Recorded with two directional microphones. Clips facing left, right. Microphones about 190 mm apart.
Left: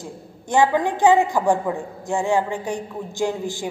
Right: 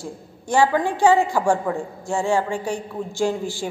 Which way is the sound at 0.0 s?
20° left (ahead or behind).